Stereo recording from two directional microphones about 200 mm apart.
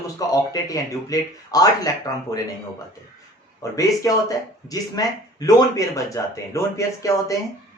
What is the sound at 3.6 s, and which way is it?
Speech, 15° left (ahead or behind).